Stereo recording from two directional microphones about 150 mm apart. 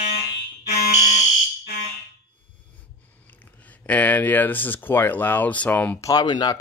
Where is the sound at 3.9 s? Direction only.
10° left (ahead or behind).